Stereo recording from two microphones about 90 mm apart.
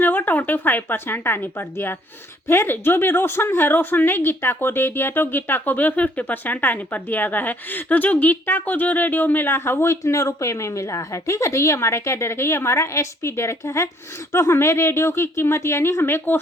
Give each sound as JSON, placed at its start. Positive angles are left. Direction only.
{"t": 0.0, "sound": "a woman's voice", "side_deg": 20}